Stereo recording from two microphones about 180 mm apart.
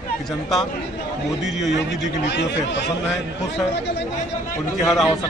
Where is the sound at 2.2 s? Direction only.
80° left.